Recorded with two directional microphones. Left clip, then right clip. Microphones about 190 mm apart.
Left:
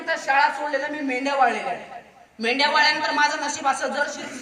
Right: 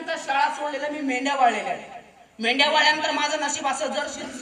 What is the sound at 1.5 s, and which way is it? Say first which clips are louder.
A man's voice: right 1 dB; 20° right (ahead or behind).